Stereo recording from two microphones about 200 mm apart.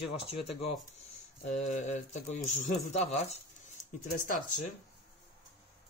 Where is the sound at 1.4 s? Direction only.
35° left (ahead or behind).